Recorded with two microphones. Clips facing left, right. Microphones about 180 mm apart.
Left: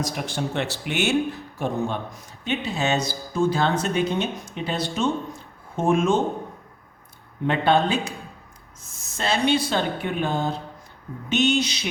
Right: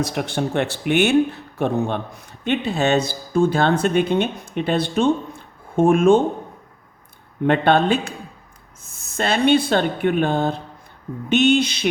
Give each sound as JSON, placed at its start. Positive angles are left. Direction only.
{"t": 0.0, "sound": "speech", "side_deg": -60}
{"t": 7.4, "sound": "speech", "side_deg": -60}